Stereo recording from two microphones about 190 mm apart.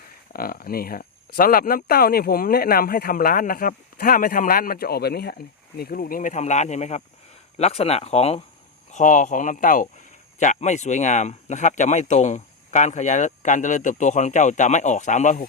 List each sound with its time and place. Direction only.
0.3 s speech: 50° left (ahead or behind)